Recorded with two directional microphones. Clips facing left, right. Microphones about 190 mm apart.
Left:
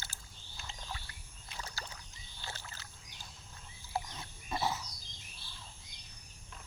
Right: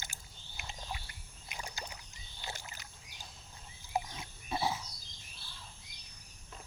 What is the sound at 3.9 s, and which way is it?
Pig, 15° right (ahead or behind).